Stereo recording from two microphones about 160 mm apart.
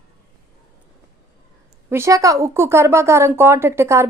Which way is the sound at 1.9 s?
15° right (ahead or behind).